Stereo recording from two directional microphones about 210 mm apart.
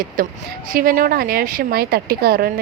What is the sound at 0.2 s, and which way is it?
Speech, 40° right (ahead or behind).